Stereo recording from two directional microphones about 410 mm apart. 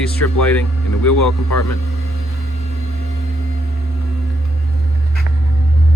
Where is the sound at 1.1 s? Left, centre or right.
Left.